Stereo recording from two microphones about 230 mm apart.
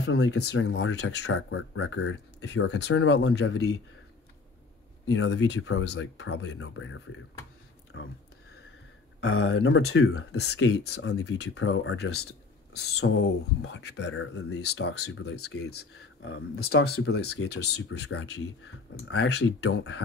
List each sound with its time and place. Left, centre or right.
0.0 s speech: left
5.0 s speech: left
9.2 s speech: left
12.8 s speech: left